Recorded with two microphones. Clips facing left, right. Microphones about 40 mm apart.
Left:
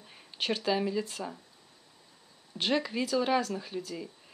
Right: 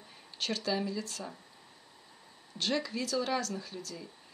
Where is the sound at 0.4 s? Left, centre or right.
Centre.